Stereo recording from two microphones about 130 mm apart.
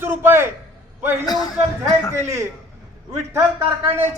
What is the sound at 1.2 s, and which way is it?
Speech, 30° left (ahead or behind).